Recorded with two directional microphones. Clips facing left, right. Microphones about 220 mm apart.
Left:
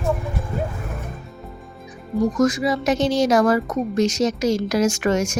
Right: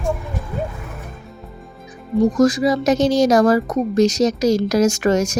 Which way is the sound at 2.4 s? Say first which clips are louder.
Right 4 dB; 35° right (ahead or behind).